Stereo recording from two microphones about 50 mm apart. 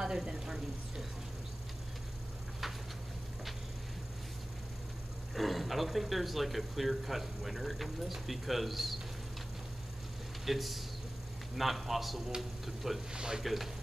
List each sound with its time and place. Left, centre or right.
0.0 s speech: centre
5.3 s a man's voice: centre
10.4 s a man's voice: centre
13.1 s speech: centre
13.4 s a man's voice: centre